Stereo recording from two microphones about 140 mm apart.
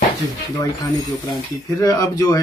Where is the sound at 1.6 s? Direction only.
25° left (ahead or behind).